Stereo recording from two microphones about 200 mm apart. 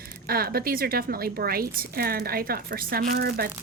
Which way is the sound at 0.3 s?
50° right (ahead or behind).